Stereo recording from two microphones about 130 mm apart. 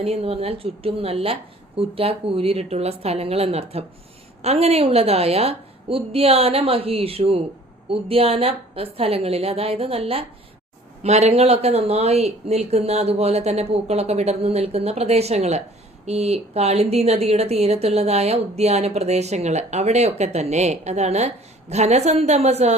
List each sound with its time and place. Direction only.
0.0 s a woman's voice: 50° right (ahead or behind)